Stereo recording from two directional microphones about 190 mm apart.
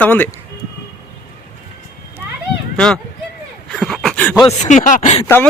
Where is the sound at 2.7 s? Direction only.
5° left (ahead or behind).